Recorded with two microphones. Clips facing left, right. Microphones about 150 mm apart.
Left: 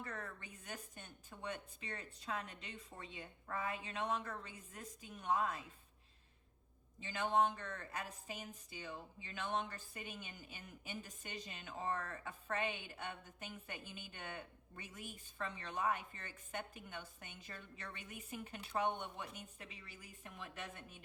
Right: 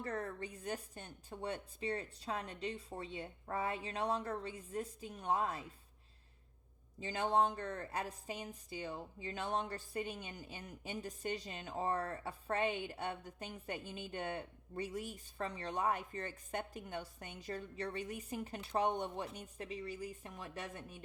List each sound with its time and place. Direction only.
0.0 s a woman's voice: 35° right (ahead or behind)
7.0 s a woman's voice: 35° right (ahead or behind)